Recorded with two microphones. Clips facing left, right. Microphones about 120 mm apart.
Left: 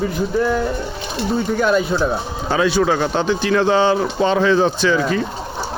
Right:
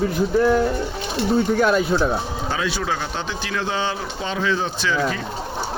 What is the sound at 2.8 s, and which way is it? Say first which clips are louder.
Speech: left 8 dB; 65° left (ahead or behind).